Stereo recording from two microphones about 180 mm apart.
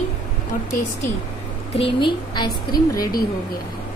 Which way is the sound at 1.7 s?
30° left (ahead or behind).